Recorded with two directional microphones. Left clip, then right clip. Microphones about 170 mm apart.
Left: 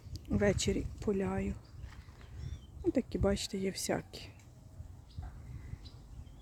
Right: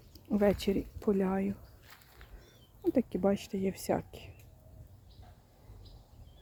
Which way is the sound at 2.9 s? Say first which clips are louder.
Right 4 dB; 5° right (ahead or behind).